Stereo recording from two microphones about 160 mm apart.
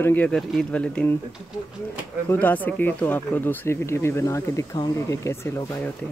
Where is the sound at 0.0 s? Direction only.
10° left (ahead or behind).